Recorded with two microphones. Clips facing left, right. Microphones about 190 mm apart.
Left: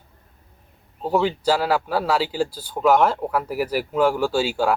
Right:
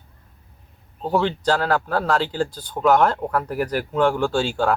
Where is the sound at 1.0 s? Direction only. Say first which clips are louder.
Even; 5° left (ahead or behind).